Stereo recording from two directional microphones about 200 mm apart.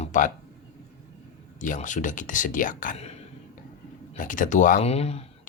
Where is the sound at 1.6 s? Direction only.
40° left (ahead or behind).